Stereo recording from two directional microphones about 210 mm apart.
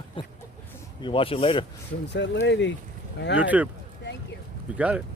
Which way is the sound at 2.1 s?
55° left (ahead or behind).